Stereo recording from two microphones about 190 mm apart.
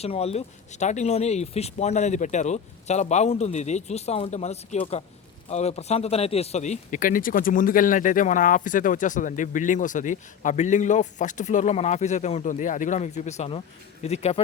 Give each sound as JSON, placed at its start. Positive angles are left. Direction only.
{"t": 0.0, "sound": "speech", "side_deg": 30}